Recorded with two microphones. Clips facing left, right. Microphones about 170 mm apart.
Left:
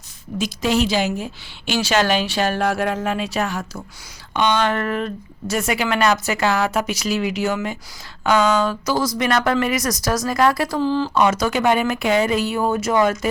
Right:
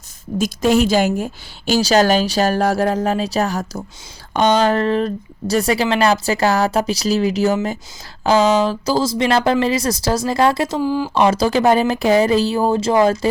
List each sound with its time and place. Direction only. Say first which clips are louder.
0.3 s a woman's voice: right 4 dB; 45° right (ahead or behind); by 10.8 s 25° right (ahead or behind)
10.8 s speech: right 1 dB; 10° right (ahead or behind)
11.1 s a woman's voice: right 3 dB; 30° right (ahead or behind)